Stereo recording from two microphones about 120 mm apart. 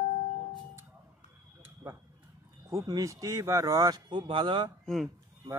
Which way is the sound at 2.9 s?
30° right (ahead or behind).